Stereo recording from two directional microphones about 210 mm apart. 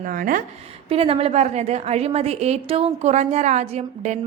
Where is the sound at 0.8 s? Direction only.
25° right (ahead or behind).